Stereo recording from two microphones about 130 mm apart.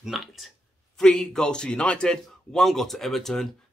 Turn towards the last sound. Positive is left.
turn(degrees=5)  # may be behind; listen again after turning